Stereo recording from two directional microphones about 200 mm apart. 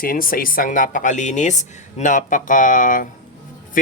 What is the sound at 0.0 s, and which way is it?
Speech, 45° left (ahead or behind).